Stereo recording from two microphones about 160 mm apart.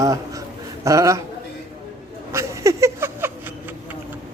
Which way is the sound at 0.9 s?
20° right (ahead or behind).